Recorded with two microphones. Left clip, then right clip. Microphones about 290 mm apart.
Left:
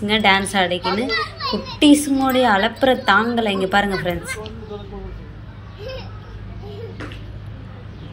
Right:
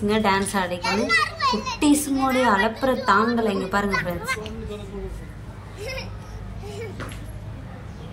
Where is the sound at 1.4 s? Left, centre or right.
Right.